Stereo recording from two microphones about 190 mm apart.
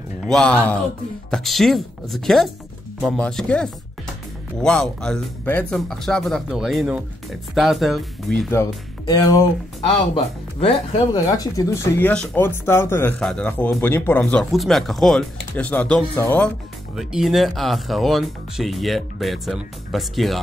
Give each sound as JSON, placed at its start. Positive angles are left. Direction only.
{"t": 0.2, "sound": "speech", "side_deg": 5}
{"t": 9.0, "sound": "speech", "side_deg": 20}
{"t": 10.1, "sound": "speech", "side_deg": 30}
{"t": 11.2, "sound": "speech", "side_deg": 20}
{"t": 16.9, "sound": "speech", "side_deg": 0}